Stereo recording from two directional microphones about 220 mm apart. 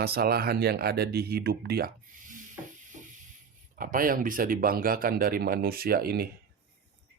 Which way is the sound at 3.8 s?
40° right (ahead or behind).